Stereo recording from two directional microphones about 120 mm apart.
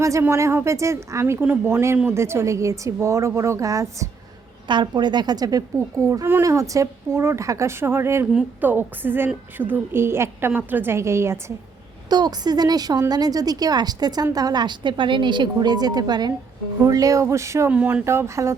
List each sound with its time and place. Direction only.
0.0 s a woman's voice: 25° right (ahead or behind)
4.7 s a woman's voice: 40° right (ahead or behind); by 8.3 s 20° right (ahead or behind)
8.3 s a woman's voice: 5° right (ahead or behind)
8.7 s a woman's voice: 20° right (ahead or behind)
12.0 s a woman's voice: 35° right (ahead or behind)
17.7 s a woman's voice: 10° right (ahead or behind)
18.0 s a woman's voice: 20° right (ahead or behind)